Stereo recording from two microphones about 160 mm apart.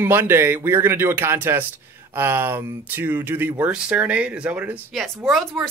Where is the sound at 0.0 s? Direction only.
15° right (ahead or behind).